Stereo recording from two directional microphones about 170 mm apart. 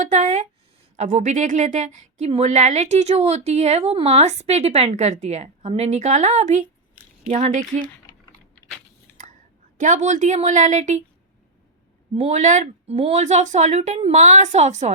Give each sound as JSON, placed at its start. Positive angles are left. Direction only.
{"t": 0.0, "sound": "a sound", "side_deg": -45}
{"t": 0.9, "sound": "a woman's voice", "side_deg": -45}
{"t": 9.7, "sound": "speech", "side_deg": -45}
{"t": 12.1, "sound": "speech", "side_deg": -45}